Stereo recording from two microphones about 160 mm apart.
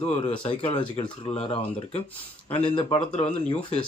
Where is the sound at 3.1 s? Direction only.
50° left (ahead or behind).